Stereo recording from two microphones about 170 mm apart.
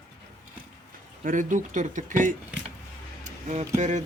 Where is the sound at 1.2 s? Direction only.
50° right (ahead or behind).